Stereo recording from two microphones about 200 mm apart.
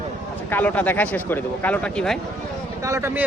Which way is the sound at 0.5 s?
10° left (ahead or behind).